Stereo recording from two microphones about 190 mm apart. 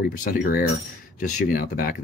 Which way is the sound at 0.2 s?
50° left (ahead or behind).